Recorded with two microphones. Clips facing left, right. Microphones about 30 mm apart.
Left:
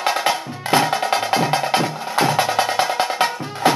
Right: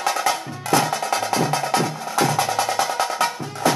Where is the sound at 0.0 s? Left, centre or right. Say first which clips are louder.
Left 2 dB; left.